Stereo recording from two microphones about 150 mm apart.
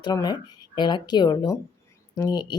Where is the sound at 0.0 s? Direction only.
30° left (ahead or behind).